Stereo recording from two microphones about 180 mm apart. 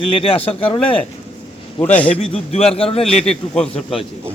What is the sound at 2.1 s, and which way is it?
A man's voice, 35° left (ahead or behind).